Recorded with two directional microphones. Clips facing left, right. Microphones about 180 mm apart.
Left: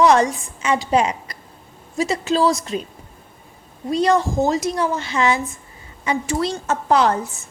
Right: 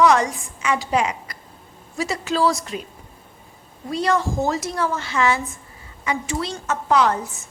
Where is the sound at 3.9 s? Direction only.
20° left (ahead or behind).